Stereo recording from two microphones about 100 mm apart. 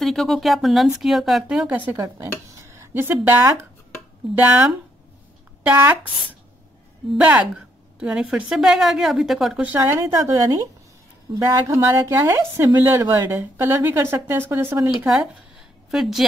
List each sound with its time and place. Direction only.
0.0 s a woman's voice: centre (ahead or behind)
2.0 s speech: 30° right (ahead or behind)
5.6 s a woman's voice: 15° right (ahead or behind)
7.2 s a woman's voice: 15° right (ahead or behind)
9.6 s speech: 15° right (ahead or behind)
9.9 s a woman's voice: 30° right (ahead or behind)
15.0 s a woman's voice: centre (ahead or behind)